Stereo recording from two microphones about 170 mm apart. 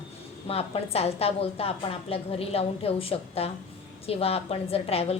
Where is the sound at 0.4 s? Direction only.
35° left (ahead or behind).